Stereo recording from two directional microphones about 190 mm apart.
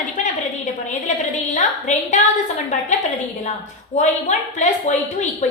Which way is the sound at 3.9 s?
40° left (ahead or behind).